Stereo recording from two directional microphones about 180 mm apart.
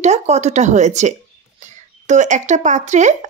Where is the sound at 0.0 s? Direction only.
40° right (ahead or behind).